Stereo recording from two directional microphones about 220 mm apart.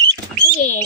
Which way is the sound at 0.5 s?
35° left (ahead or behind).